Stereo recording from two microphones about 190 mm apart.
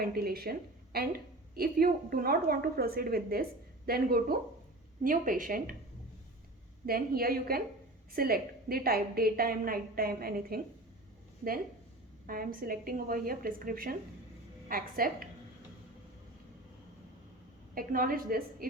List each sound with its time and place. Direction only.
0.0 s a woman's voice: 55° right (ahead or behind)
6.8 s a woman's voice: 50° right (ahead or behind)
12.2 s a woman's voice: 50° right (ahead or behind)
17.7 s a woman's voice: 50° right (ahead or behind)